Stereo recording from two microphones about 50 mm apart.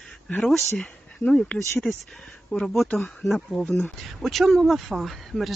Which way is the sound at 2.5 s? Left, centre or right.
Left.